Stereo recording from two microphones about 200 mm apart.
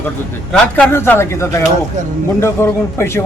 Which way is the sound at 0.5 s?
5° left (ahead or behind).